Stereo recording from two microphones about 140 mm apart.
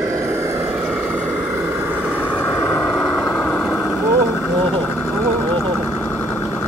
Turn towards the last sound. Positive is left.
turn(degrees=10)  # may be behind; listen again after turning